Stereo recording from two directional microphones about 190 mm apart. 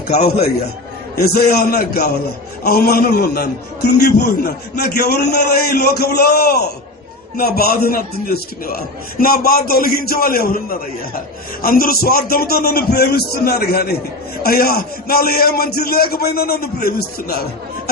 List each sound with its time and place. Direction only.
0.1 s a man's voice: 55° left (ahead or behind)